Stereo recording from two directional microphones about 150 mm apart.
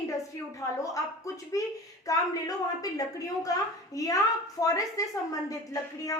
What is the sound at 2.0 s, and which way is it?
A woman's voice, 25° left (ahead or behind).